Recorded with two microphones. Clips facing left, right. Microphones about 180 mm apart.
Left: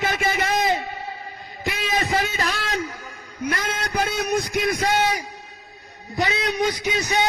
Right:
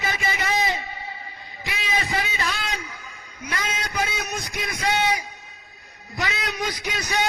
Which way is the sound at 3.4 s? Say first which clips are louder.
Left 4 dB; 55° left (ahead or behind).